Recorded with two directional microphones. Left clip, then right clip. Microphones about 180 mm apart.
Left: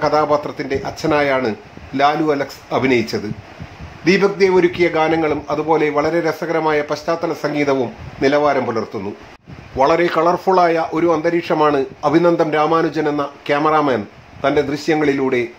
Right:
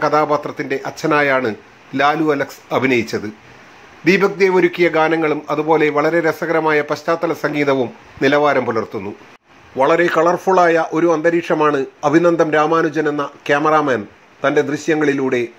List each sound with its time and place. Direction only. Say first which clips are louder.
0.0 s a man's voice: even; 10° right (ahead or behind)